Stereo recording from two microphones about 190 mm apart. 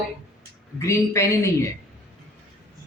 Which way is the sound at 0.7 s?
15° left (ahead or behind).